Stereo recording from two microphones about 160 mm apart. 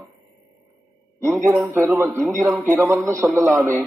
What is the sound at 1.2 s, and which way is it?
A man's voice, 15° right (ahead or behind).